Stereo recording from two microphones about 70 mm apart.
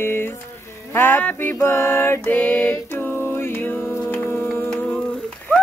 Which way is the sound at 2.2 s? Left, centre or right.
Left.